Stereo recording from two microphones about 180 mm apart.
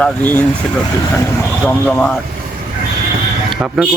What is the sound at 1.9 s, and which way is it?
Speech, 5° left (ahead or behind).